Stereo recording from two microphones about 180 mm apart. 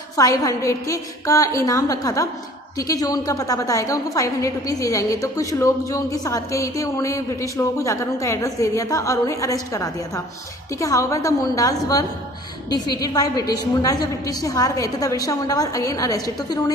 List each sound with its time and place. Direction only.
0.1 s a woman's voice: 20° left (ahead or behind)